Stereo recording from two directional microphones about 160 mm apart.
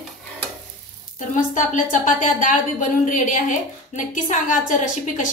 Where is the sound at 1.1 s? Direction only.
50° left (ahead or behind).